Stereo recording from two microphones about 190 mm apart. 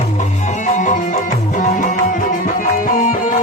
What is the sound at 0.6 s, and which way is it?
Music, 40° left (ahead or behind).